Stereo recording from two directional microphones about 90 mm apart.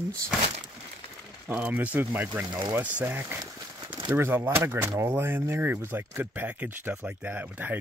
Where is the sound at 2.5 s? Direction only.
50° right (ahead or behind).